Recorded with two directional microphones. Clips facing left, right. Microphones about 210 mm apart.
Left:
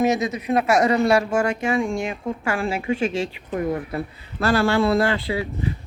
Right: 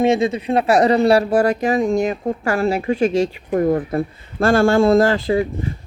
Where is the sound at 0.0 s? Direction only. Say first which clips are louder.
Right 4 dB; 30° right (ahead or behind).